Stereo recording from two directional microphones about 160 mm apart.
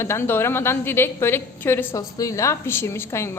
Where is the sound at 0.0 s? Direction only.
15° left (ahead or behind).